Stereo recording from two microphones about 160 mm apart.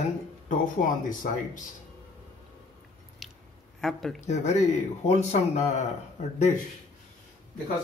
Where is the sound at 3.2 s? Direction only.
Centre (ahead or behind).